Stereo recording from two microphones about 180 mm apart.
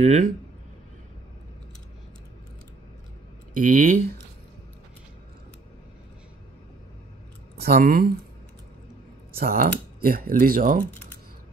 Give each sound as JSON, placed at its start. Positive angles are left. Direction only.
{"t": 0.0, "sound": "speech", "side_deg": -40}
{"t": 3.5, "sound": "speech", "side_deg": -50}
{"t": 7.5, "sound": "speech", "side_deg": -60}
{"t": 9.4, "sound": "speech", "side_deg": -55}